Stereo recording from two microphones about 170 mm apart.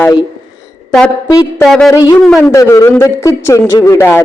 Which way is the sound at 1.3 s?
20° left (ahead or behind).